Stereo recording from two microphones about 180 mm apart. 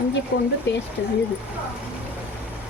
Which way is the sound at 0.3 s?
60° left (ahead or behind).